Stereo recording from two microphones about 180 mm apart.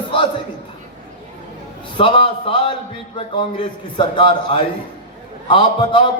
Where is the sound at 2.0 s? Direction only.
30° left (ahead or behind).